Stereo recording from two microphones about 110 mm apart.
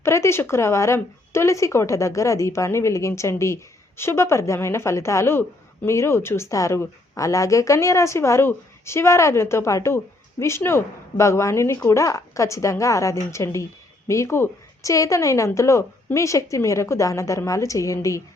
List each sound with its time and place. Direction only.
0.0 s speech: 25° left (ahead or behind)